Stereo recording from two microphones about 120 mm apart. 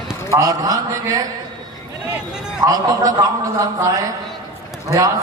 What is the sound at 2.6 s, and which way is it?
A man's voice, 30° right (ahead or behind).